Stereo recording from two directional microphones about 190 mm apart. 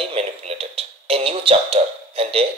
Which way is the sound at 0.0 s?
30° right (ahead or behind).